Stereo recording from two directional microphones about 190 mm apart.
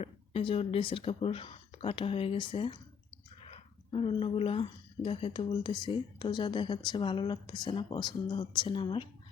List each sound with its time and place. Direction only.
0.0 s speech: 30° left (ahead or behind)